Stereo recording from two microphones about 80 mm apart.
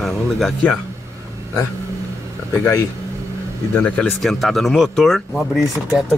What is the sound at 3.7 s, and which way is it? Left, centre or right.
Speech, centre.